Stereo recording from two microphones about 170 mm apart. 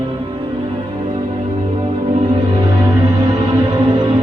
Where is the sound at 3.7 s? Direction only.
25° right (ahead or behind).